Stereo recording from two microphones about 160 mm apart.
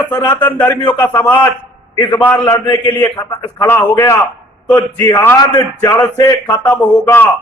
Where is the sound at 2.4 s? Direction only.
25° left (ahead or behind).